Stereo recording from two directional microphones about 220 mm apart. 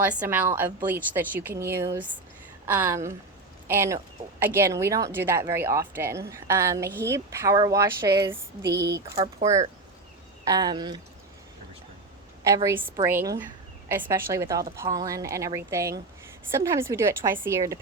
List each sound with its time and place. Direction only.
0.0 s a woman's voice: 5° right (ahead or behind)
8.7 s speech: 50° right (ahead or behind)
9.2 s speech: 30° right (ahead or behind)
10.4 s a woman's voice: 15° right (ahead or behind)
12.4 s a woman's voice: 15° right (ahead or behind)